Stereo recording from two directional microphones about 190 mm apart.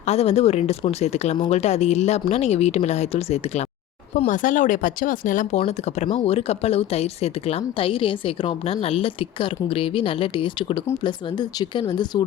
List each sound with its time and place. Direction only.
0.0 s speech: 35° left (ahead or behind)